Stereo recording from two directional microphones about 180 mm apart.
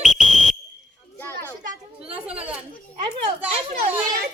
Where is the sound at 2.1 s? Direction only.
5° right (ahead or behind).